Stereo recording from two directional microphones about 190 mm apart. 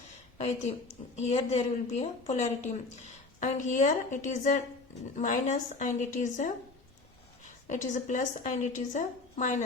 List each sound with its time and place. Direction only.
0.3 s a woman's voice: 35° left (ahead or behind)